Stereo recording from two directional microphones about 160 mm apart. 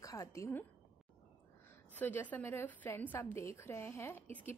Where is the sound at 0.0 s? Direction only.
20° left (ahead or behind).